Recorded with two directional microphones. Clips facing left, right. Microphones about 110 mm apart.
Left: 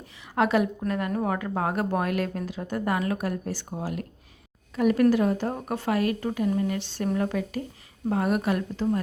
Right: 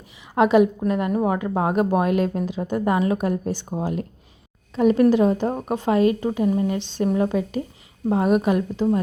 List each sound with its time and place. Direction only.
0.3 s a woman's voice: 20° right (ahead or behind)